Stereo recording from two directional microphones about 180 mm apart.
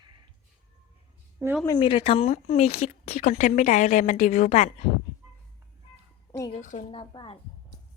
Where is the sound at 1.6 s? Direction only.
25° left (ahead or behind).